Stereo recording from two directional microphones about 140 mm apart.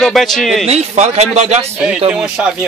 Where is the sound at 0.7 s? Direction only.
50° right (ahead or behind).